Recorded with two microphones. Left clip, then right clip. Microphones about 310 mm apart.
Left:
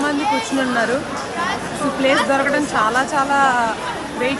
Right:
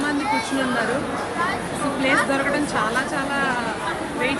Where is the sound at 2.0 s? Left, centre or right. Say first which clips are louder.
Left 4 dB; left.